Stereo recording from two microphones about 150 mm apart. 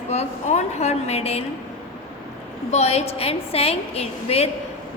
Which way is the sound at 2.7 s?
45° left (ahead or behind).